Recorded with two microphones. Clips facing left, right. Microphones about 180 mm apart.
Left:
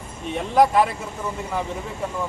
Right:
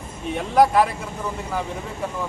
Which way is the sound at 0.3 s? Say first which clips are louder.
Even; centre (ahead or behind).